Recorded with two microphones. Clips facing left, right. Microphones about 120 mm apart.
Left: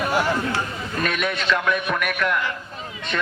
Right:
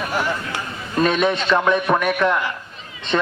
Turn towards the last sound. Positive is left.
turn(degrees=-25)  # may be behind; listen again after turning